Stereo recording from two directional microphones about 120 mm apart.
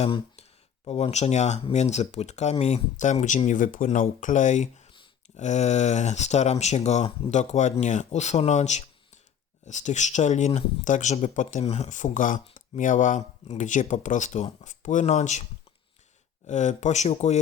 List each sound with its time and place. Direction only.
0.9 s speech: 65° left (ahead or behind); by 4.7 s 85° left
5.4 s speech: 75° left (ahead or behind)
9.6 s speech: 90° left
16.5 s speech: 85° left